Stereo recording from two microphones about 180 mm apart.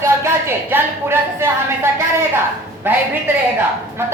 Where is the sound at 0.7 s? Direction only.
10° right (ahead or behind).